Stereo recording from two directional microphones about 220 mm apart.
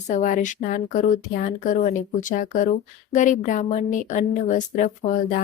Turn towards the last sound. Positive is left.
turn(degrees=35)  # may be behind; listen again after turning